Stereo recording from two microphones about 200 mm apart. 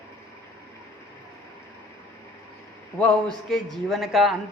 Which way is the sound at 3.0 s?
5° left (ahead or behind).